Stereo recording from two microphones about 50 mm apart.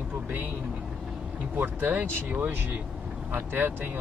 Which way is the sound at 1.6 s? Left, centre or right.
Right.